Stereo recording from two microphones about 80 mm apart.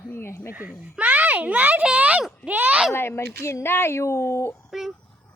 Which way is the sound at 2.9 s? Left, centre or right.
Left.